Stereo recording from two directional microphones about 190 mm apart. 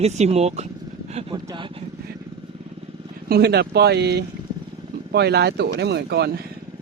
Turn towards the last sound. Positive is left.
turn(degrees=-60)  # may be behind; listen again after turning